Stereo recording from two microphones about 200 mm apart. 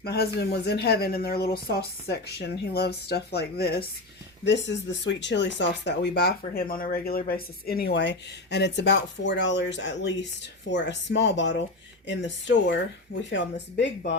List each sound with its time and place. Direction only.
0.0 s speech: 50° left (ahead or behind)
4.4 s speech: 65° left (ahead or behind)